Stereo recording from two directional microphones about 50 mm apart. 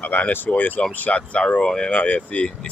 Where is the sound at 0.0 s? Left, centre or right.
Left; by 1.9 s centre.